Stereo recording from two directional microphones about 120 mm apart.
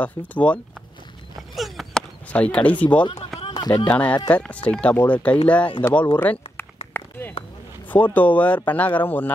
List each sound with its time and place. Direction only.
0.0 s speech: 10° left (ahead or behind)
1.5 s a sound: centre (ahead or behind)
2.3 s speech: 10° left (ahead or behind)
3.3 s run: 50° left (ahead or behind)
3.8 s speech: 10° left (ahead or behind)
6.1 s a sound: 15° left (ahead or behind)
7.9 s speech: 15° left (ahead or behind)